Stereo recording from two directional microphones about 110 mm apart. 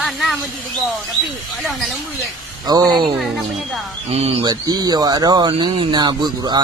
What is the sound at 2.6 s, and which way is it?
Speech, 40° right (ahead or behind).